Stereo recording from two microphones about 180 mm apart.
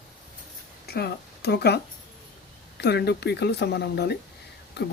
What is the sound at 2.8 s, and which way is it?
Speech, 65° left (ahead or behind).